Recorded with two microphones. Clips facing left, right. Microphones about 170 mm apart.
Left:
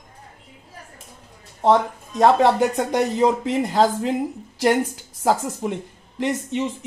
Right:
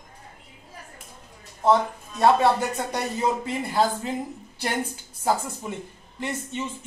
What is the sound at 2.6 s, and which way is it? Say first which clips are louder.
A woman's voice: left 8 dB; 80° left.